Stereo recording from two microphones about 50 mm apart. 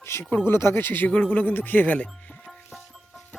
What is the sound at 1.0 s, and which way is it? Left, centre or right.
Speech, left.